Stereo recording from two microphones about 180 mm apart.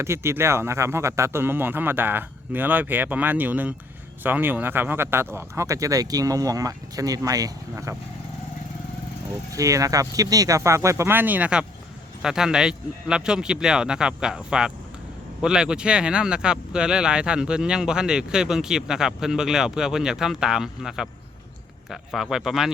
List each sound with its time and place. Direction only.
0.0 s speech: 15° right (ahead or behind)
9.5 s speech: 20° right (ahead or behind); by 22.7 s centre (ahead or behind)